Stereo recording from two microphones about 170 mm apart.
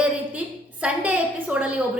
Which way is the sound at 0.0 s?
5° right (ahead or behind).